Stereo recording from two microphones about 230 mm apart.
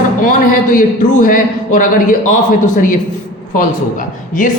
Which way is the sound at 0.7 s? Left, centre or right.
Left.